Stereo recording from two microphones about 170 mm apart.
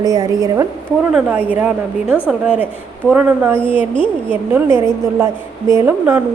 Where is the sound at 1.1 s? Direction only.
10° right (ahead or behind).